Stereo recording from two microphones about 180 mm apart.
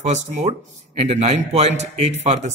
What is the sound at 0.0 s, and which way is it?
A man's voice, 40° right (ahead or behind).